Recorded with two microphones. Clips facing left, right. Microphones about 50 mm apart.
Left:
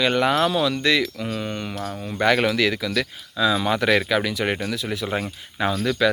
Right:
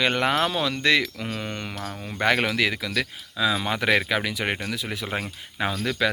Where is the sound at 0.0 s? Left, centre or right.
Right.